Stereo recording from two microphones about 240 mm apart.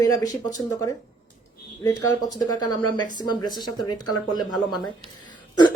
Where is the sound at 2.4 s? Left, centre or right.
Centre.